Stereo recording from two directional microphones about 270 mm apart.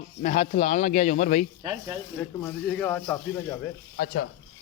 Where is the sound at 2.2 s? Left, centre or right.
Centre.